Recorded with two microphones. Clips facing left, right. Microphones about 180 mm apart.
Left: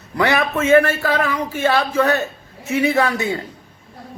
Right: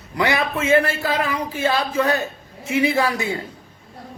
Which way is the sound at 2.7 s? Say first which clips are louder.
Left 2 dB; 30° left (ahead or behind).